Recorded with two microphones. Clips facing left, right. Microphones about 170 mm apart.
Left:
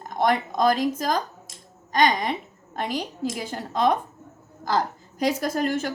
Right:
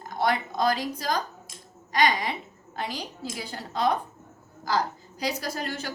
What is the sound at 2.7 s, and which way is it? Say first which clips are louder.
A woman's voice: left 5 dB; 50° left (ahead or behind).